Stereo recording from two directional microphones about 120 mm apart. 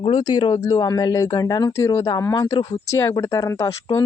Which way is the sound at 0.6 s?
30° left (ahead or behind).